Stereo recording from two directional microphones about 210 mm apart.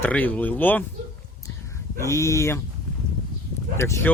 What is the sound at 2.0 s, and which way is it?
Speech, 15° left (ahead or behind).